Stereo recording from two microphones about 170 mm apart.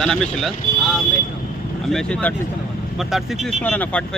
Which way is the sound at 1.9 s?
5° left (ahead or behind).